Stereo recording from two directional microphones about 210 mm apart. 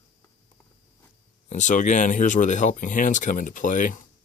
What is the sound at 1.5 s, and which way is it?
Speech, 35° left (ahead or behind).